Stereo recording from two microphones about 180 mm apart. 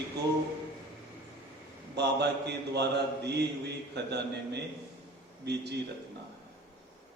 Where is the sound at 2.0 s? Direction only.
65° right (ahead or behind).